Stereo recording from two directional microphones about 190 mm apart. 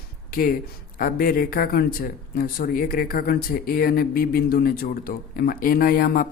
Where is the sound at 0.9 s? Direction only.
50° left (ahead or behind).